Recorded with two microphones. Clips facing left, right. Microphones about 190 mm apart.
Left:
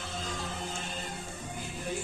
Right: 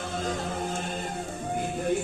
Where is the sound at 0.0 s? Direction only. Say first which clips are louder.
Right 7 dB; 55° right (ahead or behind).